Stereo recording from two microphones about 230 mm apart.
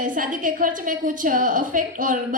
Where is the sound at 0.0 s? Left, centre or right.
Right.